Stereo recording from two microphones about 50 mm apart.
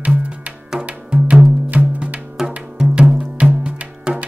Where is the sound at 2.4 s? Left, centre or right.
Centre.